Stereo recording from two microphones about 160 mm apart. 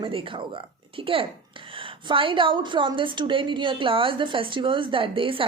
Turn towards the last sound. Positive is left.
turn(degrees=-35)  # may be behind; listen again after turning